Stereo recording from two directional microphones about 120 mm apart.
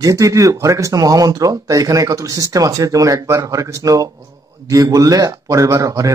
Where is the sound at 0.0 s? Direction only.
30° right (ahead or behind).